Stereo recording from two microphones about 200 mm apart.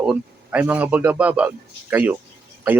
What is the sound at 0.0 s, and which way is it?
Speech, 5° right (ahead or behind).